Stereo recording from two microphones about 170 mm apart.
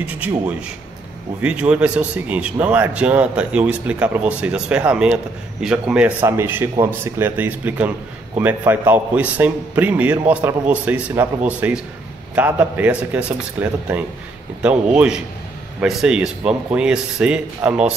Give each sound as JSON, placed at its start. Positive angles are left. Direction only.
{"t": 1.4, "sound": "a man's voice", "side_deg": -5}